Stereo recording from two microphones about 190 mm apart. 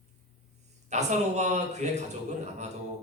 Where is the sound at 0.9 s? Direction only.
35° right (ahead or behind).